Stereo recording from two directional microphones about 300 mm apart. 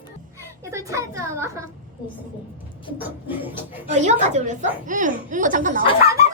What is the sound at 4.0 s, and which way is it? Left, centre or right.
Speech, right.